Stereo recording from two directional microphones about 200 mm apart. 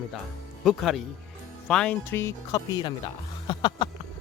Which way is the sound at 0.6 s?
Centre (ahead or behind).